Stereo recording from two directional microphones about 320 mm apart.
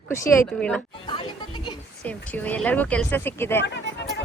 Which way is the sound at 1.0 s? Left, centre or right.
Centre.